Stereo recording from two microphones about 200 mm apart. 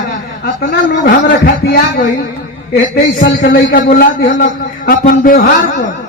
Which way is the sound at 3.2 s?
70° left (ahead or behind).